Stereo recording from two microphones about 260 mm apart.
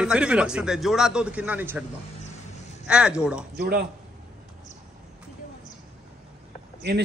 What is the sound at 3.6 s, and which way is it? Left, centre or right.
Speech, right.